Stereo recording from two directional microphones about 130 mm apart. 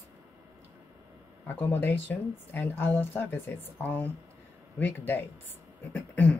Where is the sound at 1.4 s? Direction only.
15° left (ahead or behind).